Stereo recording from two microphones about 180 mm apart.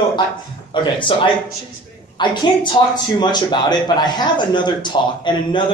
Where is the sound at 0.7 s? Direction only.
25° left (ahead or behind).